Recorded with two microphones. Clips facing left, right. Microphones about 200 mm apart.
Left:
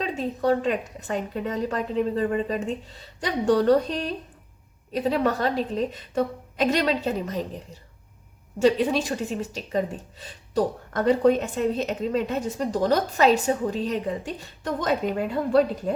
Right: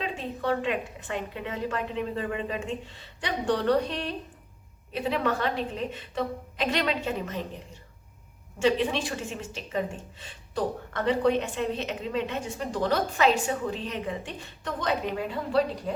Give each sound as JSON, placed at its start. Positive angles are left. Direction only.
{"t": 0.0, "sound": "speech", "side_deg": 40}